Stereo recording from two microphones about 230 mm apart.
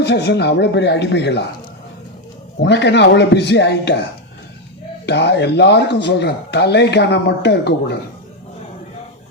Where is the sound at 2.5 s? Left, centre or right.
Left.